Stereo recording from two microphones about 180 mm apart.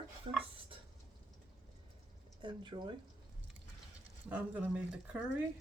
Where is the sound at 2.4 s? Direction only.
25° right (ahead or behind).